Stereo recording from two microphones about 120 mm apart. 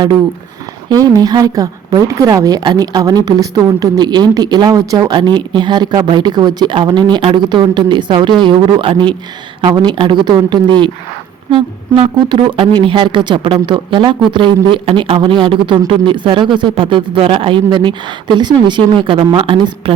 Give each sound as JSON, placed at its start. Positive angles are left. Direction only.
{"t": 1.0, "sound": "speech", "side_deg": -35}